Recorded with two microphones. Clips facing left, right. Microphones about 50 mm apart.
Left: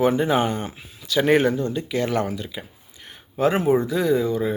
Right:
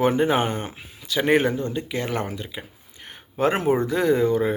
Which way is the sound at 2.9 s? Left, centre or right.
Right.